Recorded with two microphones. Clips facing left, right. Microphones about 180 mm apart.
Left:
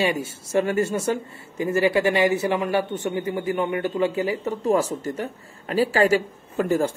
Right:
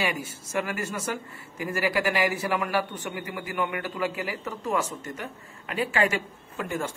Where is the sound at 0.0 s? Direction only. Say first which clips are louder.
Left 6 dB; 30° left (ahead or behind).